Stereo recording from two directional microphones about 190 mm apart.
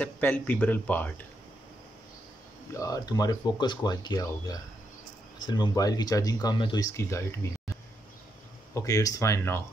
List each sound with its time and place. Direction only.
0.0 s speech: 10° left (ahead or behind)
2.7 s speech: 15° left (ahead or behind)
8.7 s speech: 15° left (ahead or behind)